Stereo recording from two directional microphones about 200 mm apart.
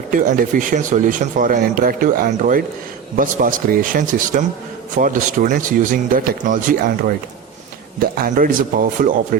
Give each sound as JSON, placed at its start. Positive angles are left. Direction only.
{"t": 0.1, "sound": "speech", "side_deg": -45}
{"t": 8.0, "sound": "speech", "side_deg": -45}